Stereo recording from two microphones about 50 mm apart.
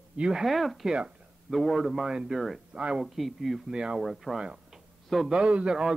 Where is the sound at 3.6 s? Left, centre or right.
Centre.